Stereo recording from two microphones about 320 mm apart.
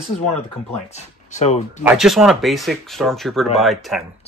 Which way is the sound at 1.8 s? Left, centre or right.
Centre.